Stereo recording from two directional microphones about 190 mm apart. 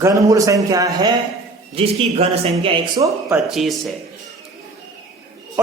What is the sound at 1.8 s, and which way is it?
Speech, 30° right (ahead or behind).